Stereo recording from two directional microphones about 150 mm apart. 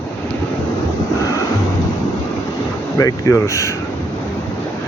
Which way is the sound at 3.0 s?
25° left (ahead or behind).